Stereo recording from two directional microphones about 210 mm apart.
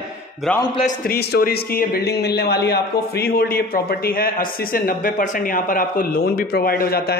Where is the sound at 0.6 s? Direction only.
20° left (ahead or behind).